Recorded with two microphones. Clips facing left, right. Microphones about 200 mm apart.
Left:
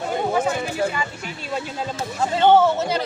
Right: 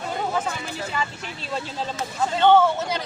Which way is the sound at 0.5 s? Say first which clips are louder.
Left 9 dB; 55° left (ahead or behind).